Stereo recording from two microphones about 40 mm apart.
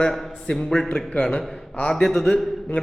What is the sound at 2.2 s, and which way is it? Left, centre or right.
Speech, left.